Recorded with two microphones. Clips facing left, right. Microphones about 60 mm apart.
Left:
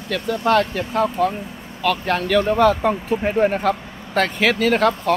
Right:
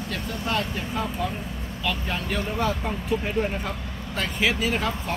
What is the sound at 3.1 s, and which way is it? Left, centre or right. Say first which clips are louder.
Speech: left 5 dB; left.